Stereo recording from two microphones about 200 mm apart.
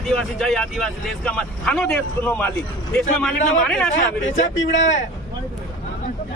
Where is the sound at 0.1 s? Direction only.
Centre (ahead or behind).